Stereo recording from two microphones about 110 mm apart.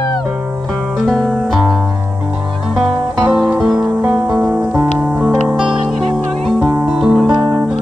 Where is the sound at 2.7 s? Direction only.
Centre (ahead or behind).